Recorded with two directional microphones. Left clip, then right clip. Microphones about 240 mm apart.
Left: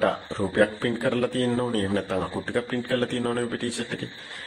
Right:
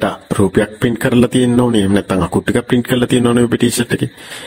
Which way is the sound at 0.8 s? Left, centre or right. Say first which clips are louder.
Right 11 dB; right.